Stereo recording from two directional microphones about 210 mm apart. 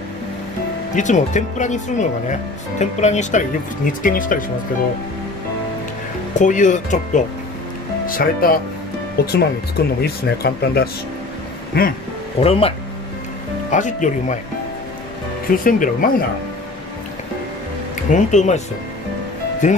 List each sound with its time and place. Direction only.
0.9 s speech: 35° left (ahead or behind)
6.3 s speech: 35° left (ahead or behind)
12.4 s speech: 30° left (ahead or behind)
15.5 s speech: 40° left (ahead or behind)
18.1 s speech: 35° left (ahead or behind)
19.6 s speech: 35° left (ahead or behind)